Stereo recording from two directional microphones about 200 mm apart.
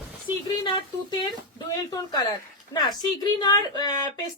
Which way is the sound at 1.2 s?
20° left (ahead or behind).